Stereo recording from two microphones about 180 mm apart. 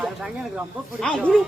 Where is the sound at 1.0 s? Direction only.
Centre (ahead or behind).